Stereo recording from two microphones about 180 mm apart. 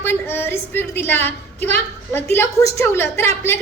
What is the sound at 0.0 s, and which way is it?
A woman's voice, 10° left (ahead or behind).